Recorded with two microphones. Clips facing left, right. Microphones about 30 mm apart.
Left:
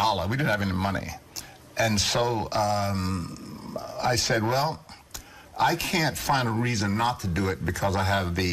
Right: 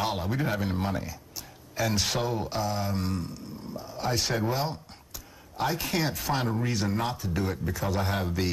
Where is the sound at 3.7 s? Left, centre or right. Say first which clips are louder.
Left 5 dB; left.